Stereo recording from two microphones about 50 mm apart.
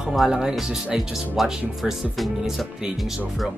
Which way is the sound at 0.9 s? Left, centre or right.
Centre.